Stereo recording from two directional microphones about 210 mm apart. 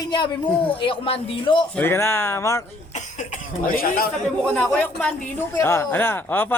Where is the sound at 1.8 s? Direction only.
10° left (ahead or behind).